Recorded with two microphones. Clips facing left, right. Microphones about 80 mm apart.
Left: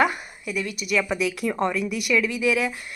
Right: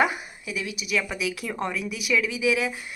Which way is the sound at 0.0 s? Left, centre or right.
Centre.